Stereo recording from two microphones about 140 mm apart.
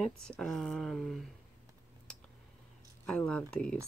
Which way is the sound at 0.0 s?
Centre (ahead or behind).